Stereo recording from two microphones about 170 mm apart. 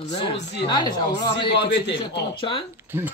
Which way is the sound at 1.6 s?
90° left.